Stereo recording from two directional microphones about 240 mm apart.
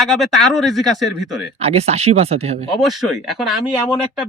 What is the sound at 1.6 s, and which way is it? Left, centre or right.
Speech, right.